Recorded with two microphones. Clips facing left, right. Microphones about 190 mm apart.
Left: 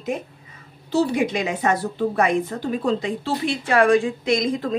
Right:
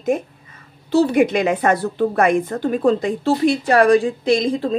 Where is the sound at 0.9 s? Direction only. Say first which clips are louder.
Right 5 dB; 60° right (ahead or behind); by 4.7 s 30° right (ahead or behind).